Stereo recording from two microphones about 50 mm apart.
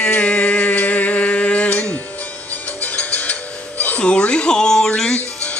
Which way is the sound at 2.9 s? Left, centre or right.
Left.